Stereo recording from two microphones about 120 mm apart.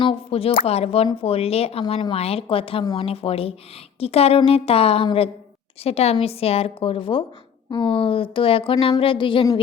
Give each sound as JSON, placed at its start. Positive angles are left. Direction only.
{"t": 0.0, "sound": "a woman's voice", "side_deg": 50}